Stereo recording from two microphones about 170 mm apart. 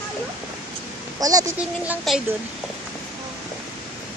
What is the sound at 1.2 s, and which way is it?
Speech, 20° right (ahead or behind).